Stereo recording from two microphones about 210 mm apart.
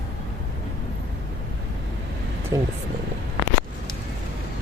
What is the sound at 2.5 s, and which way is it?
Speech, 15° right (ahead or behind).